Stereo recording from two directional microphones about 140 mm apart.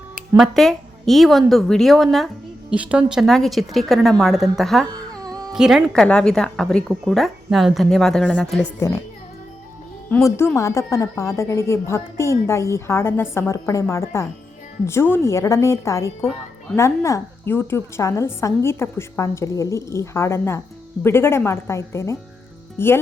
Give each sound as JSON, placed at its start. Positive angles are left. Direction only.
{"t": 0.3, "sound": "a woman's voice", "side_deg": 0}
{"t": 5.2, "sound": "music", "side_deg": -25}
{"t": 5.5, "sound": "a woman's voice", "side_deg": 0}
{"t": 10.1, "sound": "a woman's voice", "side_deg": 20}